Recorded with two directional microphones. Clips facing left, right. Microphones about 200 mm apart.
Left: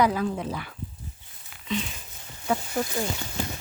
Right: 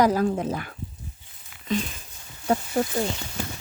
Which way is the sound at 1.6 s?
45° right (ahead or behind).